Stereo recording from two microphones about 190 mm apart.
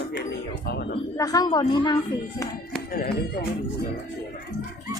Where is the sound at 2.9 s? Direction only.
55° left (ahead or behind).